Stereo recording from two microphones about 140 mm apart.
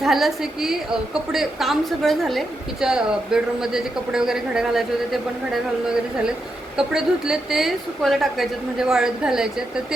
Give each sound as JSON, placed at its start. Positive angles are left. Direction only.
{"t": 0.0, "sound": "a woman's voice", "side_deg": 0}
{"t": 6.7, "sound": "a woman's voice", "side_deg": -5}